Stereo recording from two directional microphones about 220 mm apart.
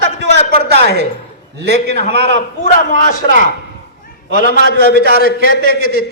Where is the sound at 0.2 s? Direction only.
50° right (ahead or behind).